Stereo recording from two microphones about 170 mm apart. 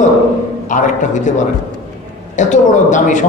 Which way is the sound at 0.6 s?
50° left (ahead or behind).